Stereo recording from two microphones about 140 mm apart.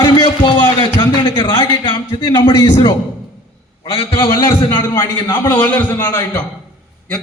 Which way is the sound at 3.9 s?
45° left (ahead or behind).